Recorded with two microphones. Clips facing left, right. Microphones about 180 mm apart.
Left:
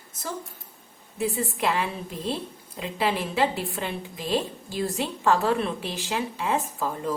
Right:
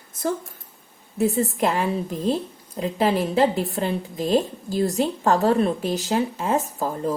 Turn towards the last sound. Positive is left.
turn(degrees=-40)  # may be behind; listen again after turning